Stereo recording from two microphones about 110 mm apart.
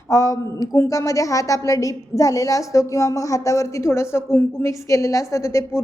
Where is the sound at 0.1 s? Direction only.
30° left (ahead or behind).